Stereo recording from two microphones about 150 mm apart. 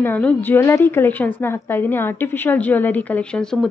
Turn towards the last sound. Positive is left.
turn(degrees=5)  # may be behind; listen again after turning